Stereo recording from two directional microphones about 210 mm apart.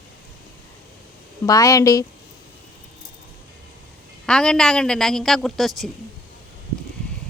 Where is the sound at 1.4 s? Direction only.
15° left (ahead or behind).